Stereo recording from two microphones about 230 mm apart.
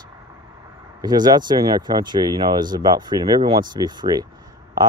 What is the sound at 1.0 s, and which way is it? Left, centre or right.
Speech, centre.